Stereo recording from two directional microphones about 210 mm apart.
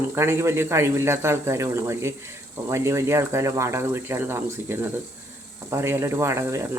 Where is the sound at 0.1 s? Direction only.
10° right (ahead or behind).